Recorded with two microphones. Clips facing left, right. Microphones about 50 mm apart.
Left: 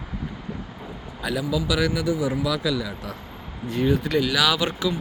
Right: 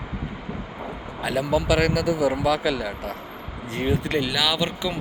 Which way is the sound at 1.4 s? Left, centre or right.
Right.